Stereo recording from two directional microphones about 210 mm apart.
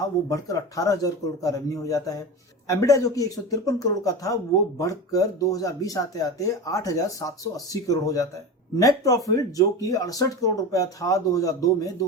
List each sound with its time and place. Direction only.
0.3 s speech: 15° left (ahead or behind)